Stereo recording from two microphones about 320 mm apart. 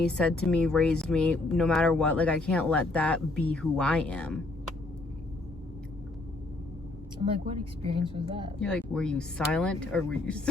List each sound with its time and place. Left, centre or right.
0.0 s speech: centre
7.9 s a woman's voice: centre
8.5 s speech: centre